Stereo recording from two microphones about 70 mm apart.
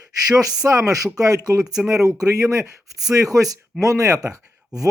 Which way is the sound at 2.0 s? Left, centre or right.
Right.